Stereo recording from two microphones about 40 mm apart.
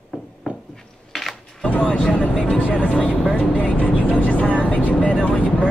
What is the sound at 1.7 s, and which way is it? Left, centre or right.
Vehicle, left.